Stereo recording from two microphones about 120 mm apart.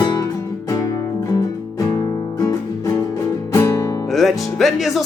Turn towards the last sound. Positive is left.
turn(degrees=0)  # may be behind; listen again after turning